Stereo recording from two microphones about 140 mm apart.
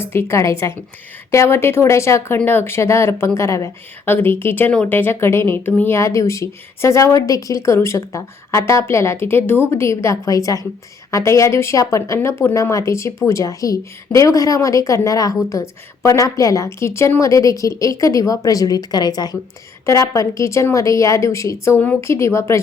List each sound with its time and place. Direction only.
0.0 s speech: 15° left (ahead or behind)